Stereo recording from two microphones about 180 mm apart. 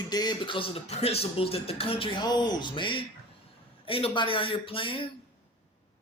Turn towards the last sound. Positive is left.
turn(degrees=30)  # may be behind; listen again after turning